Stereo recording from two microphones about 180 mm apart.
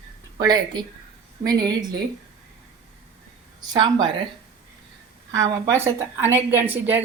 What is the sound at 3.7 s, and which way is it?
Speech, 25° right (ahead or behind).